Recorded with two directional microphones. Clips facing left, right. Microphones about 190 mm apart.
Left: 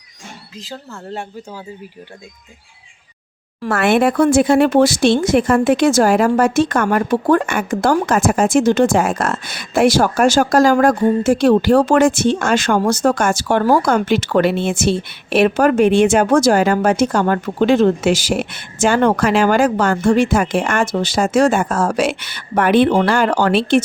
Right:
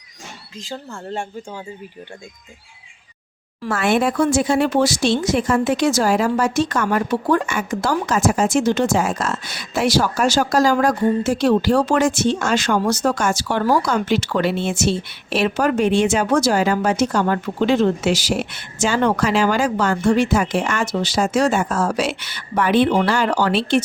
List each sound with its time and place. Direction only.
0.6 s speech: centre (ahead or behind)
3.6 s speech: 60° left (ahead or behind)